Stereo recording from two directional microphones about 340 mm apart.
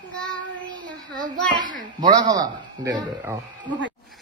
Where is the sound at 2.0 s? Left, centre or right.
Centre.